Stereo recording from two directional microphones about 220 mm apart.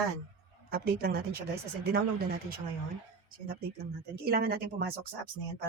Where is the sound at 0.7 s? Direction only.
45° right (ahead or behind).